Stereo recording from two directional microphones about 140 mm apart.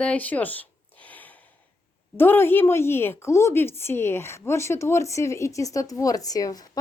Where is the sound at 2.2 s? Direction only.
15° left (ahead or behind).